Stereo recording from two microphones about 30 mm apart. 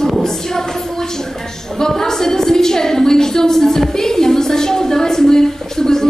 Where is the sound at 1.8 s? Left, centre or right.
Centre.